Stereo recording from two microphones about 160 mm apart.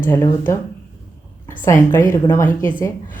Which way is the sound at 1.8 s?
15° left (ahead or behind).